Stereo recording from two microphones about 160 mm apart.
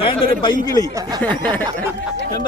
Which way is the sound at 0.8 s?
20° right (ahead or behind).